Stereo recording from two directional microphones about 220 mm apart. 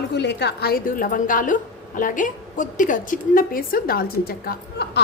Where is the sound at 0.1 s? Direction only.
50° left (ahead or behind).